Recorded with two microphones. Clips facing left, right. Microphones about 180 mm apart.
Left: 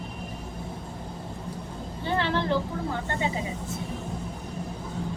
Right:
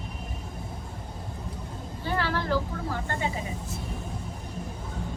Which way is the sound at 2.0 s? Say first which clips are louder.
Left 2 dB; 25° left (ahead or behind).